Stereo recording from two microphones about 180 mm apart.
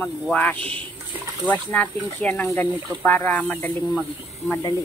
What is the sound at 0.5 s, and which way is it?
Speech, 30° right (ahead or behind).